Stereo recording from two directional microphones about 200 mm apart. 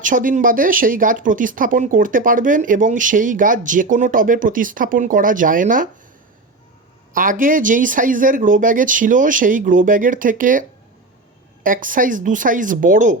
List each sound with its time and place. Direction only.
0.0 s speech: 40° right (ahead or behind)
7.1 s speech: 45° right (ahead or behind)